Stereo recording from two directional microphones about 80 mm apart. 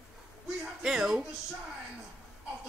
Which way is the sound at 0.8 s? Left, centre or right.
Centre.